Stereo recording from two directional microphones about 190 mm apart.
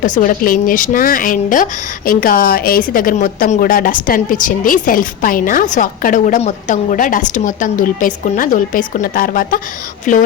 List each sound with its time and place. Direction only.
0.0 s a woman's voice: 45° left (ahead or behind)